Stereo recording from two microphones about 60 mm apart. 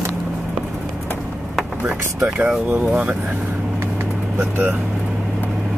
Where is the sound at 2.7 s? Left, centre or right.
Right.